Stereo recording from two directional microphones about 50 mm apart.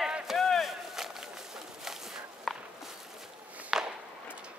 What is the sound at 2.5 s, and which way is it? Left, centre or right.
Walk, centre.